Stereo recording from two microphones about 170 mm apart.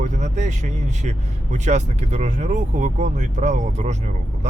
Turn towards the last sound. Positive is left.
turn(degrees=-45)  # may be behind; listen again after turning